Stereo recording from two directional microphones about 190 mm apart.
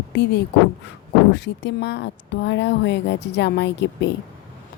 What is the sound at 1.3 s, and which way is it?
A woman's voice, 65° left (ahead or behind).